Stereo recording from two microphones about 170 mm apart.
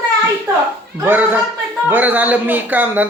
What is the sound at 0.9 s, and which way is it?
A man's voice, 10° right (ahead or behind).